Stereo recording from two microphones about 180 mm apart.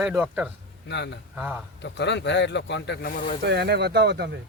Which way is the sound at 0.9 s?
75° left (ahead or behind).